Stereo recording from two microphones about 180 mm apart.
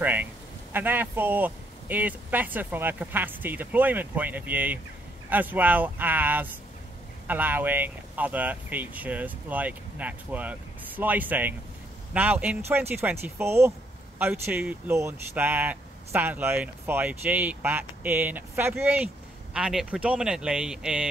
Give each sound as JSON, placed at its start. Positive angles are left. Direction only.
{"t": 0.0, "sound": "a man's voice", "side_deg": -10}